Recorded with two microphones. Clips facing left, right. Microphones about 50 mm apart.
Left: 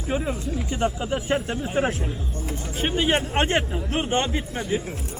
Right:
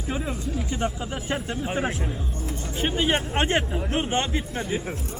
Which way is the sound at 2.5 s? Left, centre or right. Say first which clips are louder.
Left 1 dB; centre.